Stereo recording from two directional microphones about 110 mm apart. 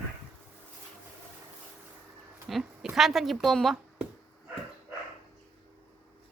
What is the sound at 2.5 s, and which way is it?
Speech, 5° right (ahead or behind).